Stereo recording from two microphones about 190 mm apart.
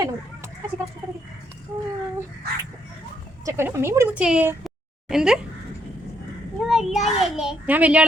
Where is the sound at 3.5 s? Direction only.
15° right (ahead or behind).